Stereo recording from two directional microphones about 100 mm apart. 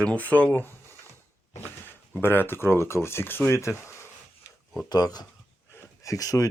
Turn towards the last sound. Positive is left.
turn(degrees=35)  # may be behind; listen again after turning